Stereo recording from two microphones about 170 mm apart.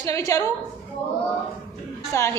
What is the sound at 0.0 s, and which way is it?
Speech, 20° left (ahead or behind).